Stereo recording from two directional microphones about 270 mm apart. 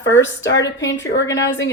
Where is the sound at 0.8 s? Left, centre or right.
Left.